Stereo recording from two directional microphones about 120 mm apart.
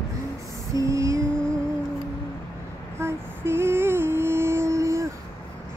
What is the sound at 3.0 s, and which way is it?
Music, 20° right (ahead or behind).